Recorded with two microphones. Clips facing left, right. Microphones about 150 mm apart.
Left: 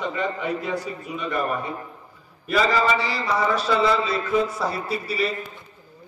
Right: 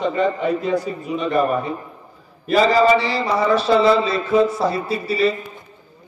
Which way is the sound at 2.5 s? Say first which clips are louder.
Right 7 dB; 30° right (ahead or behind).